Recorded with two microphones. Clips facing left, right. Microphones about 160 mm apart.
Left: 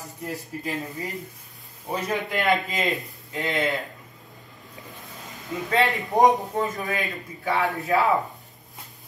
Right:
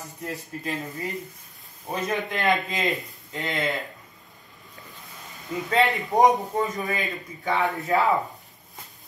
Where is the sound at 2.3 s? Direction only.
Centre (ahead or behind).